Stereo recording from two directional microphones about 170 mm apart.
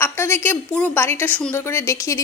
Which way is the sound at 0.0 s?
15° left (ahead or behind).